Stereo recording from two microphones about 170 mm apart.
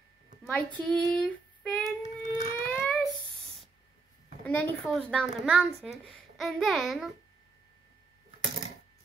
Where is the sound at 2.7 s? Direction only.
5° left (ahead or behind).